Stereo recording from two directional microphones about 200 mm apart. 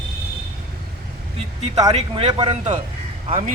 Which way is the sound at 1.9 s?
30° right (ahead or behind).